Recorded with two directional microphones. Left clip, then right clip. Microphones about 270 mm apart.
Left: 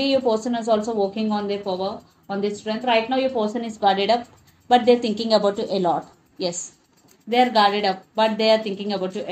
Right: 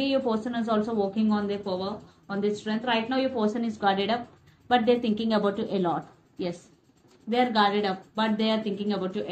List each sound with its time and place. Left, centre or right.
0.0 s speech: left